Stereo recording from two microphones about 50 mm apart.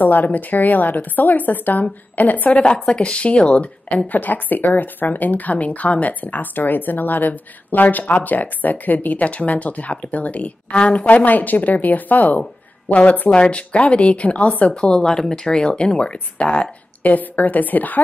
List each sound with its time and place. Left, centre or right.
0.0 s speech: left
2.9 s speech: left
4.1 s speech: left
14.7 s speech: centre
17.0 s speech: left